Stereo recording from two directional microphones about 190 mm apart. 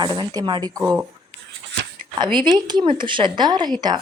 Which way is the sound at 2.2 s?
25° right (ahead or behind).